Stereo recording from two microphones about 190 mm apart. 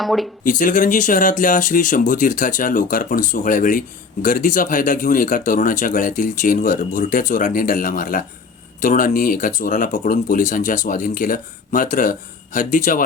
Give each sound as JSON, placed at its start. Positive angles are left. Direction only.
{"t": 0.0, "sound": "speech", "side_deg": 0}
{"t": 0.4, "sound": "speech", "side_deg": 45}